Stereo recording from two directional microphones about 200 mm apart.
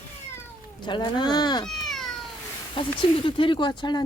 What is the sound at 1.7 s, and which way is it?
Cat, centre (ahead or behind).